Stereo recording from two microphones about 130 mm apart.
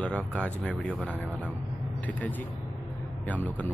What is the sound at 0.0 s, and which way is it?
A man's voice, 10° left (ahead or behind).